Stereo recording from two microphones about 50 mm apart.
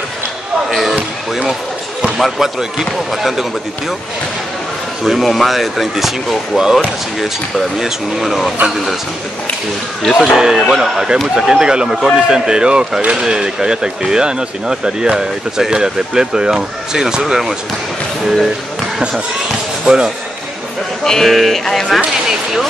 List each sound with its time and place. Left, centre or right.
0.7 s basketball bounce: centre
2.1 s speech: centre
5.0 s speech: centre
10.3 s speech: centre
19.8 s speech: centre
21.0 s speech: centre